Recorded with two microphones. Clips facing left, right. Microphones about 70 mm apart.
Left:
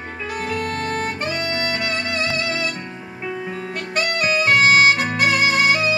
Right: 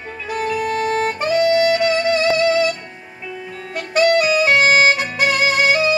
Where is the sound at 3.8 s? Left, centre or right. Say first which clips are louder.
Right 9 dB; centre.